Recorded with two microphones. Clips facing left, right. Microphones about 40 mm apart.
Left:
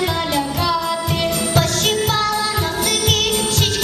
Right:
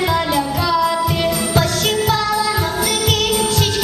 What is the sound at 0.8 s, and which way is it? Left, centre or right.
Music, right.